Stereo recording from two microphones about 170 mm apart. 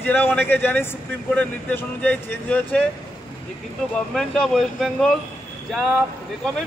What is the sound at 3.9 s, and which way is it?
Speech, 5° left (ahead or behind).